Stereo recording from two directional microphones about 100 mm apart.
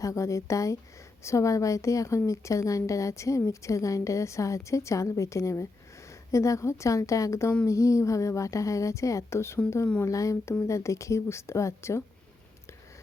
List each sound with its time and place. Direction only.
0.0 s a woman's voice: 30° left (ahead or behind)